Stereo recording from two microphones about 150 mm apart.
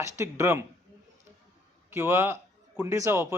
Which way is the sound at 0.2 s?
15° right (ahead or behind).